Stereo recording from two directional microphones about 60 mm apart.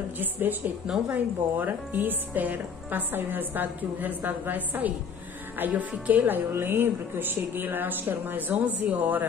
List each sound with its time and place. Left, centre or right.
0.2 s a woman's voice: right
0.8 s a woman's voice: centre
1.1 s a woman's voice: right